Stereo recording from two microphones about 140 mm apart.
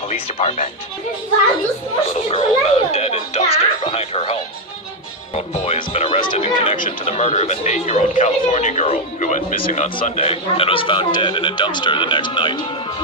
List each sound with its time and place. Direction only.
0.1 s a man's voice: 50° left (ahead or behind)
2.0 s a man's voice: 45° left (ahead or behind)
5.3 s music: 45° left (ahead or behind)
7.0 s a man's voice: 50° left (ahead or behind)
10.2 s speech: 45° left (ahead or behind)